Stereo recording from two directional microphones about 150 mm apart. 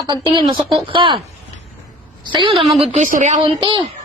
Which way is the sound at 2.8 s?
50° right (ahead or behind).